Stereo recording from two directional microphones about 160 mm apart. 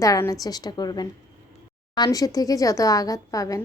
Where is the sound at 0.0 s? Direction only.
20° left (ahead or behind).